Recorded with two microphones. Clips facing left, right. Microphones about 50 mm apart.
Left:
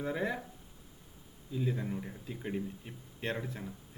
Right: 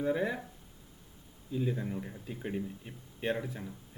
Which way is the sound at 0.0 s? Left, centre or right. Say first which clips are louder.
Right 3 dB; centre.